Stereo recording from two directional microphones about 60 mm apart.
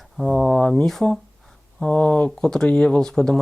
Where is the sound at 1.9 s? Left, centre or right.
Left.